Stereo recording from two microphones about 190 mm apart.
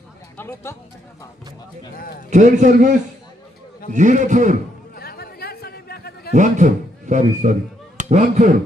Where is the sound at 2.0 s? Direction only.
50° left (ahead or behind).